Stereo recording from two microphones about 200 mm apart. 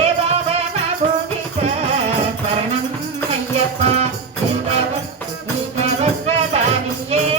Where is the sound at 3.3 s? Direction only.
30° right (ahead or behind).